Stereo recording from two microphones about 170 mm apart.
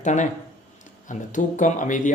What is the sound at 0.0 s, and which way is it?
Speech, 45° left (ahead or behind).